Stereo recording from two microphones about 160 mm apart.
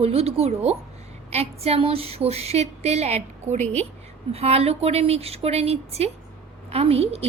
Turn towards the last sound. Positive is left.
turn(degrees=-40)  # may be behind; listen again after turning